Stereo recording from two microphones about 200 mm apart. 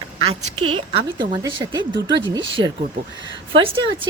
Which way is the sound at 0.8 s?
25° right (ahead or behind).